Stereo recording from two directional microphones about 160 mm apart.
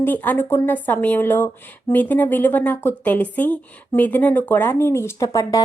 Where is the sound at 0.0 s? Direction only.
10° left (ahead or behind).